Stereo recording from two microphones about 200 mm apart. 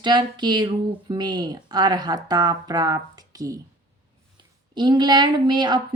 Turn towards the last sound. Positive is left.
turn(degrees=-20)  # may be behind; listen again after turning